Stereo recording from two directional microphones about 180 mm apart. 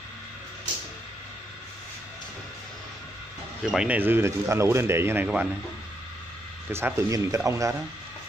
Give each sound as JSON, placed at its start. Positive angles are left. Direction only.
{"t": 3.7, "sound": "speech", "side_deg": -5}
{"t": 6.7, "sound": "speech", "side_deg": -15}